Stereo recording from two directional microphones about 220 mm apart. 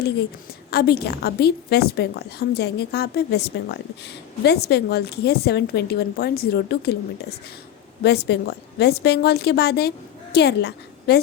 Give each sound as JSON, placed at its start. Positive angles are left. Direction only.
{"t": 0.7, "sound": "a woman's voice", "side_deg": 45}